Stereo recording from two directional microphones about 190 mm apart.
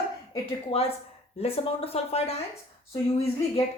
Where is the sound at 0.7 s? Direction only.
30° left (ahead or behind).